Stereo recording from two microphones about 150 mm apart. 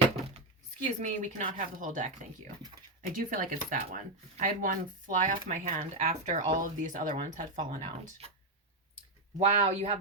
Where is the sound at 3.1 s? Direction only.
65° right (ahead or behind); by 8.3 s 45° right (ahead or behind).